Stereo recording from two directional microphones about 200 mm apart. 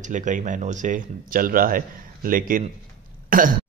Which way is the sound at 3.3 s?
45° right (ahead or behind).